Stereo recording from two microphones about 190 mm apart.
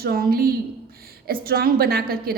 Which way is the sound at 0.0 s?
55° right (ahead or behind).